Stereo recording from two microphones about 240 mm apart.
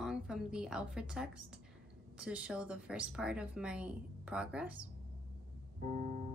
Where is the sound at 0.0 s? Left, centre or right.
Centre.